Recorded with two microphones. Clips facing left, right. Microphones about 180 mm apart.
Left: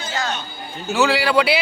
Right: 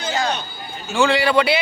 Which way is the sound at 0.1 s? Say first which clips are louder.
Right 4 dB; 15° right (ahead or behind).